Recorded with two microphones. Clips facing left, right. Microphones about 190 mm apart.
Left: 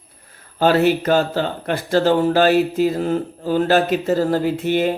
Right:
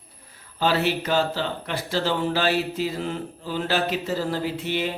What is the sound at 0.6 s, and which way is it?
Speech, 50° left (ahead or behind).